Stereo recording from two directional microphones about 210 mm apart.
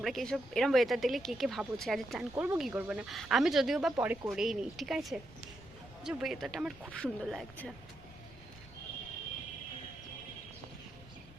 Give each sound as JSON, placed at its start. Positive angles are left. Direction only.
{"t": 0.0, "sound": "speech", "side_deg": 0}